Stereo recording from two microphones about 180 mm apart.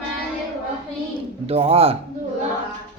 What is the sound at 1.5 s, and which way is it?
Speech, 35° right (ahead or behind).